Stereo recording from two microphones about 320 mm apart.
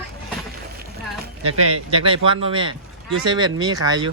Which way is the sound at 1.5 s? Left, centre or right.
Right.